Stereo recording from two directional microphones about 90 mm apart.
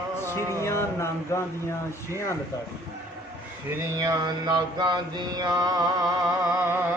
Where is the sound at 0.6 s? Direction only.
30° left (ahead or behind).